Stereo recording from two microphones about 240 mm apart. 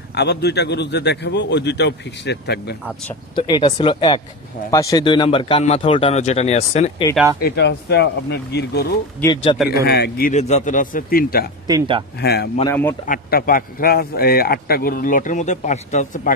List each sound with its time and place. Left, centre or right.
0.1 s a man's voice: left
3.3 s a man's voice: centre
7.4 s a man's voice: left
9.2 s a man's voice: centre
9.8 s a man's voice: left
11.6 s speech: centre
12.2 s a man's voice: left
12.6 s speech: centre
13.0 s a man's voice: left